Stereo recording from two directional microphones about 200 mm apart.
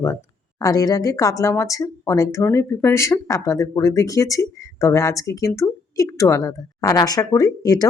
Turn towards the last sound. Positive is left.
turn(degrees=20)  # may be behind; listen again after turning